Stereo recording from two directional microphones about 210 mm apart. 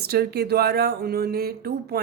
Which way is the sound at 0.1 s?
50° right (ahead or behind).